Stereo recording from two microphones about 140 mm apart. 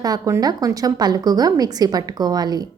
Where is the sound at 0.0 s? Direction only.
25° right (ahead or behind).